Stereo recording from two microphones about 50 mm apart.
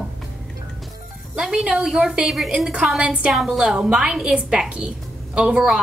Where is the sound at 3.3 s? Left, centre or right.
Centre.